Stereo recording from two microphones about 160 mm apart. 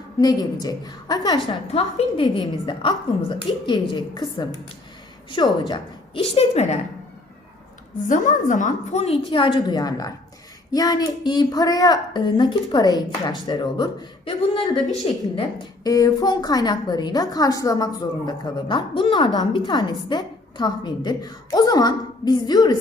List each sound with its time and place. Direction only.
0.2 s a woman's voice: 25° left (ahead or behind)
1.7 s a woman's voice: 35° left (ahead or behind)
6.2 s a woman's voice: 40° left (ahead or behind)
8.0 s a woman's voice: 50° left (ahead or behind)
9.3 s a woman's voice: 30° left (ahead or behind)